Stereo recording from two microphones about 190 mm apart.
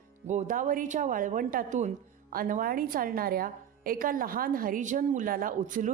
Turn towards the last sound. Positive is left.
turn(degrees=-45)  # may be behind; listen again after turning